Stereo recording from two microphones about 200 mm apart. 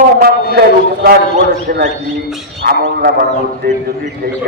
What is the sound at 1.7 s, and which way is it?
A man's voice, 50° right (ahead or behind).